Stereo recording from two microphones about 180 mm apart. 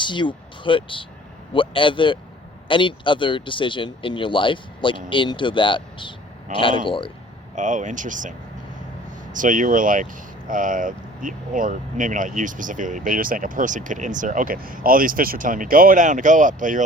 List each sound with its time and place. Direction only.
0.0 s speech: 25° left (ahead or behind)
7.5 s speech: 45° right (ahead or behind)